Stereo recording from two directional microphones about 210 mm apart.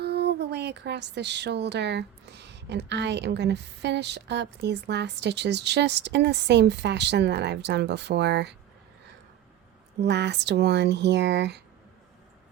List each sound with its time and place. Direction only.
0.0 s speech: 50° right (ahead or behind)
10.0 s speech: 55° right (ahead or behind)